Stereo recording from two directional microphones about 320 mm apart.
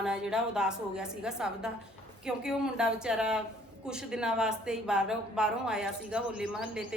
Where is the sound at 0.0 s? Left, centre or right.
Centre.